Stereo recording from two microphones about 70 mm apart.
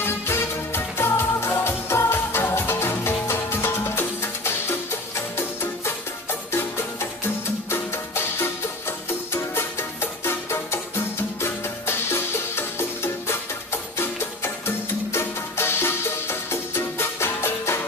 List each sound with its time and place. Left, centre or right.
0.0 s music: left
7.7 s music: left
15.1 s music: left